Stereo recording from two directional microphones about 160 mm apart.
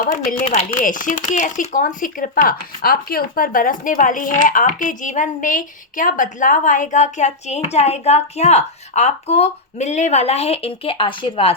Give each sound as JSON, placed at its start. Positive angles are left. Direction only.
{"t": 0.3, "sound": "speech", "side_deg": 50}